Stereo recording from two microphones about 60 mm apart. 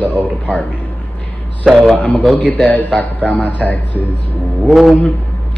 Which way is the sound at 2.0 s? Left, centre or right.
Left.